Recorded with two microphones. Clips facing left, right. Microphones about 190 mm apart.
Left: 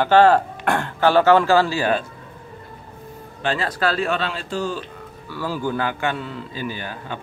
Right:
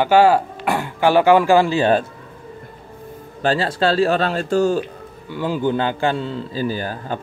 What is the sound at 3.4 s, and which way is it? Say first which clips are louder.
A man's voice: right 4 dB; 35° right (ahead or behind).